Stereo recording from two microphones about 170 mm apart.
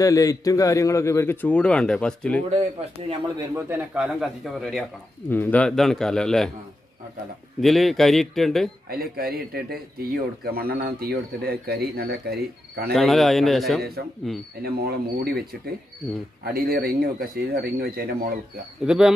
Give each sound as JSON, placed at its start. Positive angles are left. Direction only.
{"t": 0.0, "sound": "a man's voice", "side_deg": 20}
{"t": 2.5, "sound": "speech", "side_deg": -35}
{"t": 3.3, "sound": "speech", "side_deg": -15}
{"t": 5.3, "sound": "speech", "side_deg": 10}
{"t": 7.6, "sound": "speech", "side_deg": 0}
{"t": 8.8, "sound": "speech", "side_deg": -60}
{"t": 12.9, "sound": "speech", "side_deg": 0}
{"t": 14.6, "sound": "speech", "side_deg": -65}
{"t": 18.9, "sound": "speech", "side_deg": -5}